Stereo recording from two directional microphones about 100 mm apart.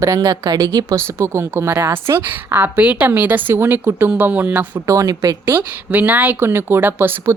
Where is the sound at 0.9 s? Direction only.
25° right (ahead or behind).